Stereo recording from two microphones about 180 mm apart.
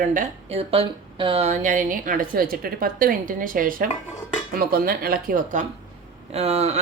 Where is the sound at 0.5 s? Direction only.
30° right (ahead or behind); by 5.6 s 55° right (ahead or behind).